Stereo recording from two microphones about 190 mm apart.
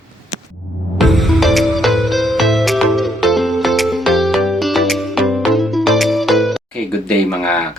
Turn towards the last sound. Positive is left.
turn(degrees=5)  # may be behind; listen again after turning